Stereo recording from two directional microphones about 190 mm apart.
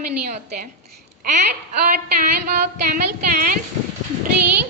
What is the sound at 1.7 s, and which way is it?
A woman's voice, 50° right (ahead or behind).